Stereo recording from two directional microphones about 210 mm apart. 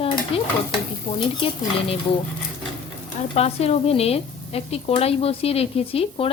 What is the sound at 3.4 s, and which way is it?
Speech, 30° left (ahead or behind).